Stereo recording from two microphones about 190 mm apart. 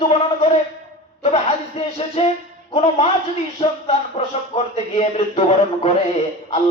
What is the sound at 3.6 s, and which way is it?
Mantra, 35° left (ahead or behind).